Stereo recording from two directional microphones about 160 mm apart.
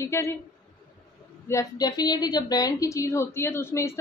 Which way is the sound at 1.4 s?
20° left (ahead or behind).